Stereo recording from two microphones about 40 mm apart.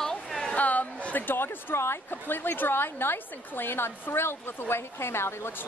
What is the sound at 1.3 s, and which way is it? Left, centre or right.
A woman's voice, left.